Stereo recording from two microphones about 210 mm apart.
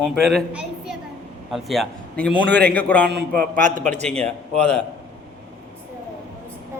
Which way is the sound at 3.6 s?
35° right (ahead or behind).